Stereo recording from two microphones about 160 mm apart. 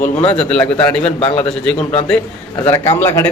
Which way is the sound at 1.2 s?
35° left (ahead or behind).